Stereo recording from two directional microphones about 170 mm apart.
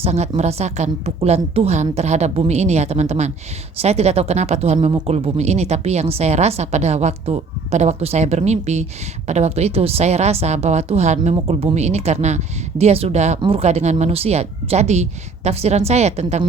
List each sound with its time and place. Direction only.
0.0 s a woman's voice: 40° right (ahead or behind)